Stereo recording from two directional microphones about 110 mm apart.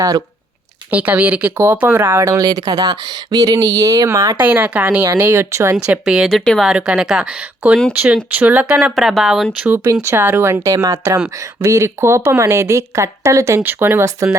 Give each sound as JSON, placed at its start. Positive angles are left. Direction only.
{"t": 0.9, "sound": "speech", "side_deg": -15}
{"t": 4.4, "sound": "a woman's voice", "side_deg": -15}
{"t": 5.7, "sound": "a woman's voice", "side_deg": -10}
{"t": 9.6, "sound": "speech", "side_deg": -20}